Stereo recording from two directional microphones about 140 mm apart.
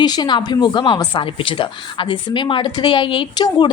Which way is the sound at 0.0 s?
30° left (ahead or behind).